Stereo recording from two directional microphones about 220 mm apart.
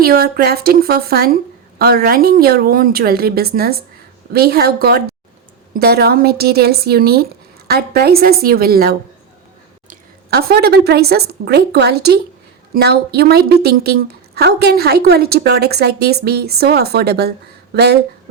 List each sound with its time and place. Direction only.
0.0 s a woman's voice: 45° right (ahead or behind)